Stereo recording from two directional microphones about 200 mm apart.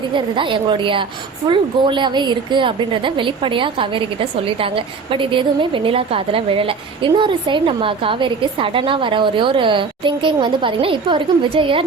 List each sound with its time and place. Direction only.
0.1 s a woman's voice: 25° right (ahead or behind)